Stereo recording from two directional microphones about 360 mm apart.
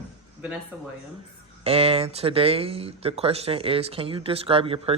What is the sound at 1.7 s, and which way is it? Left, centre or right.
Speech, centre.